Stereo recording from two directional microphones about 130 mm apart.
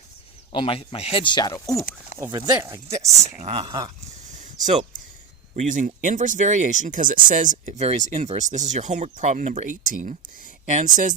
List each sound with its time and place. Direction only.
0.5 s speech: 45° left (ahead or behind)
1.5 s speech: 25° left (ahead or behind)
2.1 s speech: 25° right (ahead or behind)
3.5 s speech: 45° right (ahead or behind)
4.6 s speech: 55° right (ahead or behind)
5.5 s speech: 75° right (ahead or behind)